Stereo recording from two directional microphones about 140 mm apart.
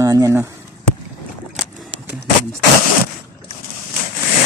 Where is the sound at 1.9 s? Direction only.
40° right (ahead or behind).